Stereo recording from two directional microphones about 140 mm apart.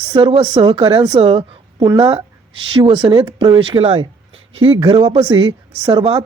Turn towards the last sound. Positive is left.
turn(degrees=-40)  # may be behind; listen again after turning